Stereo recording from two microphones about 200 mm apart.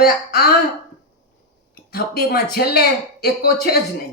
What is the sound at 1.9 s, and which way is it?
Speech, 50° left (ahead or behind).